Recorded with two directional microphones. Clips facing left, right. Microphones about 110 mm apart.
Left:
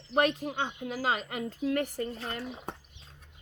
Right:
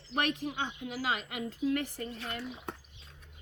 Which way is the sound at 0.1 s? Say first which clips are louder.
Left 5 dB; 35° left (ahead or behind).